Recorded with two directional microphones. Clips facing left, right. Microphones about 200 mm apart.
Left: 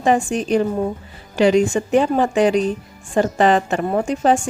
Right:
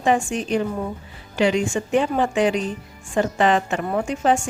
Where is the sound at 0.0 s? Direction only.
40° left (ahead or behind).